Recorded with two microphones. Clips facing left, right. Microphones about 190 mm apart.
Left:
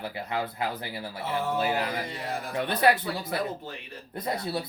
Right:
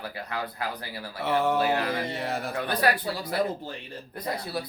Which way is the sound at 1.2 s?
70° right (ahead or behind).